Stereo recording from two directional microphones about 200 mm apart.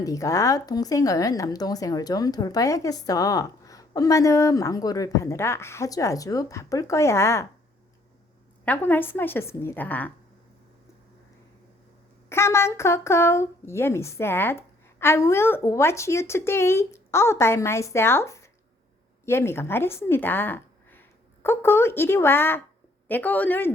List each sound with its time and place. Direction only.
0.0 s speech: 15° left (ahead or behind)
8.6 s speech: 10° left (ahead or behind)
12.3 s speech: 15° left (ahead or behind)